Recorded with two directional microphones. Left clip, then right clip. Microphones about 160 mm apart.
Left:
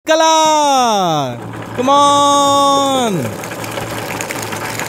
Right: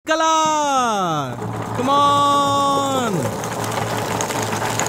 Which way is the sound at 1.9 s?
40° left (ahead or behind).